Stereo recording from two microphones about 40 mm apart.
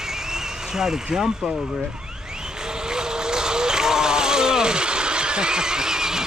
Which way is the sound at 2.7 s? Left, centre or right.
Centre.